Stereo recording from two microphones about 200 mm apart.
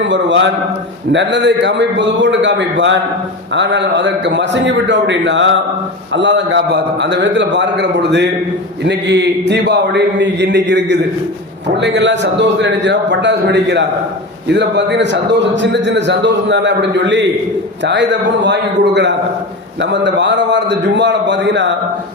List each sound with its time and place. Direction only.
0.0 s a man's voice: 65° right (ahead or behind)